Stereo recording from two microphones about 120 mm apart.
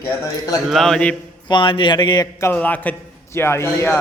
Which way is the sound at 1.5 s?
45° left (ahead or behind).